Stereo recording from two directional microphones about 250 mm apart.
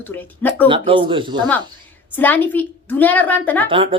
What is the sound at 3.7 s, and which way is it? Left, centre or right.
Speech, right.